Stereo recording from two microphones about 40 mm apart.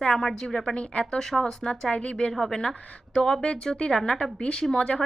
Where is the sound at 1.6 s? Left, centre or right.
Left.